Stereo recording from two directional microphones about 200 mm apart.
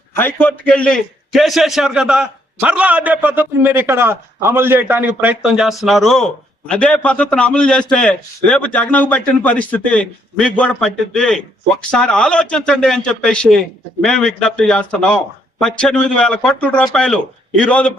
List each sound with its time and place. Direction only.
0.2 s a man's voice: 10° left (ahead or behind)